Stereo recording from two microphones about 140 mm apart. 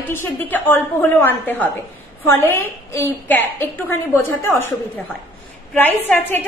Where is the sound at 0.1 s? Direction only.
15° left (ahead or behind).